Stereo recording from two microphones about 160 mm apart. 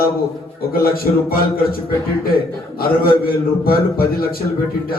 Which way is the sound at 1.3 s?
70° left (ahead or behind).